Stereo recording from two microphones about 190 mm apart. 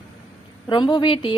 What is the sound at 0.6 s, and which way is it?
Speech, 25° left (ahead or behind).